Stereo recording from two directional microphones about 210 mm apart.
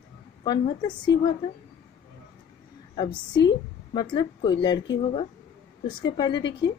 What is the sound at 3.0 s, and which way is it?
A woman's voice, 20° left (ahead or behind).